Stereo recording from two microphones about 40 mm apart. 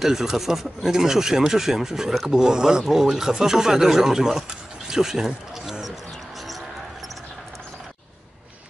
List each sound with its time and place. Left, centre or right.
0.0 s speech: centre